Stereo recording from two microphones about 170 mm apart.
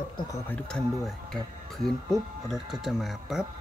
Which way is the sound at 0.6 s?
5° left (ahead or behind).